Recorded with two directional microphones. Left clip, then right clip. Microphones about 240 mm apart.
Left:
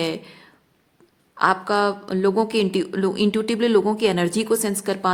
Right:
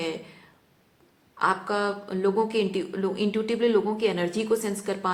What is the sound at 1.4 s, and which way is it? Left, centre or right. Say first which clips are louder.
A woman's voice: left 6 dB; left.